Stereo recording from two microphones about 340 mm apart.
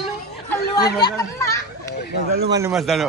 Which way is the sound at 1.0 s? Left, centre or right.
Centre.